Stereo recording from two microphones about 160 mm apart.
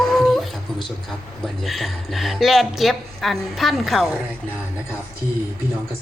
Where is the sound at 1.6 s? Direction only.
Centre (ahead or behind).